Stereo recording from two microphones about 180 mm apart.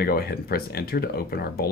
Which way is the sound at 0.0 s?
60° left (ahead or behind).